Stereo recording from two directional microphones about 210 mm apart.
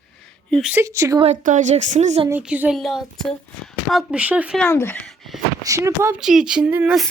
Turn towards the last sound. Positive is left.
turn(degrees=-5)  # may be behind; listen again after turning